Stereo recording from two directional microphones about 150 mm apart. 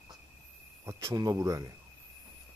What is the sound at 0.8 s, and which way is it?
Cricket, 20° right (ahead or behind).